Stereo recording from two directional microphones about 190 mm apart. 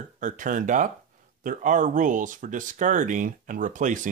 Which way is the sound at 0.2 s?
45° right (ahead or behind).